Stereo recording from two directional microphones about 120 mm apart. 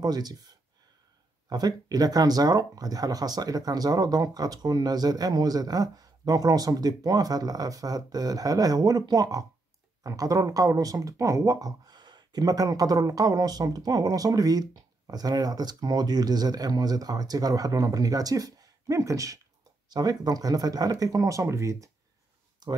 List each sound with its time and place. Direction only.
0.0 s speech: 35° right (ahead or behind)